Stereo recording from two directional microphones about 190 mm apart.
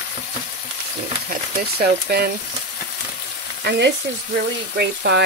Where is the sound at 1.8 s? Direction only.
55° right (ahead or behind).